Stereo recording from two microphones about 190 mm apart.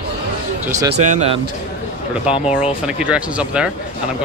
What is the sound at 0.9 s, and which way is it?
Speech, 35° right (ahead or behind).